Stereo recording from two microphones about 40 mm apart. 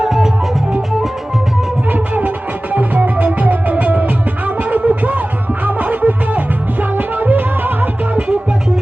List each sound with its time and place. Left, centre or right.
0.0 s music: centre
1.9 s music: right
6.9 s music: right